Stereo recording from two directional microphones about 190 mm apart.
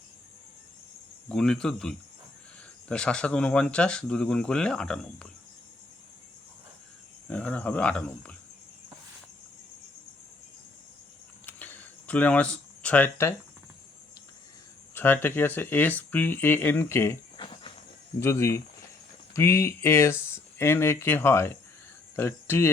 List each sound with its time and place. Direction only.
1.3 s speech: 5° left (ahead or behind)
7.3 s speech: 5° left (ahead or behind)
11.4 s a sound: 10° left (ahead or behind)
14.9 s speech: 10° left (ahead or behind)
17.3 s cricket: 25° left (ahead or behind)
18.2 s speech: 15° left (ahead or behind)